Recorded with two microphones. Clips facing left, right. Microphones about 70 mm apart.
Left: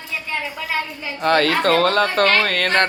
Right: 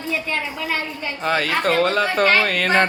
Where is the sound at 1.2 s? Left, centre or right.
Centre.